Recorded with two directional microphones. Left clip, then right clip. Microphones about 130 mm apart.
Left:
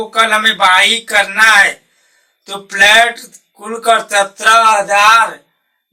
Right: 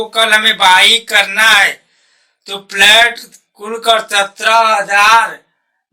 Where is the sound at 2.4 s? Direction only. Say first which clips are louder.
Even; 35° right (ahead or behind).